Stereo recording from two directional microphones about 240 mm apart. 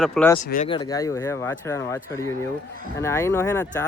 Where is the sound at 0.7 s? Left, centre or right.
Centre.